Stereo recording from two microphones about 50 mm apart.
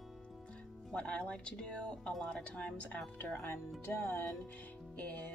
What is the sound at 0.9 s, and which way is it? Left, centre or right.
Speech, left.